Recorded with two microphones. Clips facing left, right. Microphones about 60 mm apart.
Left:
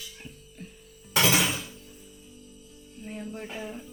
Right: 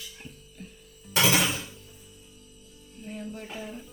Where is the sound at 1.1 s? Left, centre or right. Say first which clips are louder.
Even; centre.